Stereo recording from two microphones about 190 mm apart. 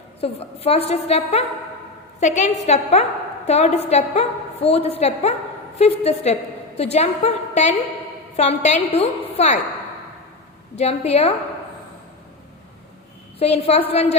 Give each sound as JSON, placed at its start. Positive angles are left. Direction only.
{"t": 0.2, "sound": "a woman's voice", "side_deg": 30}
{"t": 10.8, "sound": "a woman's voice", "side_deg": 35}
{"t": 13.4, "sound": "a woman's voice", "side_deg": 35}